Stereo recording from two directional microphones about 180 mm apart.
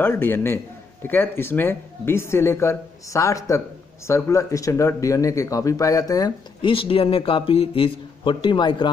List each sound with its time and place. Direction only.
0.0 s speech: 10° left (ahead or behind)